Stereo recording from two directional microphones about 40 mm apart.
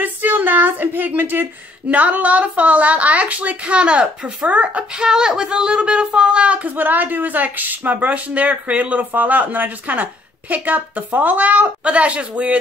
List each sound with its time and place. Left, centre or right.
0.0 s speech: right
4.5 s speech: right
4.9 s speech: centre
6.7 s speech: right